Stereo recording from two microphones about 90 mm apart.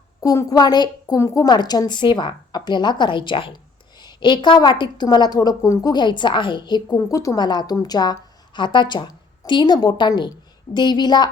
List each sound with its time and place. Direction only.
0.2 s a woman's voice: 40° left (ahead or behind)
1.2 s a woman's voice: 40° left (ahead or behind)
5.9 s a woman's voice: 55° left (ahead or behind)
7.1 s speech: 35° left (ahead or behind)
7.3 s a woman's voice: 55° left (ahead or behind)